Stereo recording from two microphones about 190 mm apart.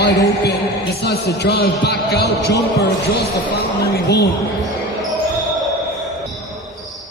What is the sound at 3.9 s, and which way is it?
Speech, 60° left (ahead or behind).